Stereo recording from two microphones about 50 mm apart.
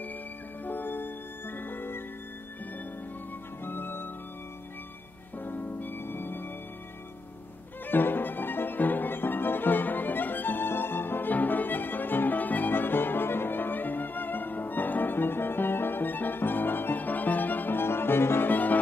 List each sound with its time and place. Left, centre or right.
0.7 s music: left
3.6 s music: left
5.4 s music: left
7.9 s music: left
18.5 s music: left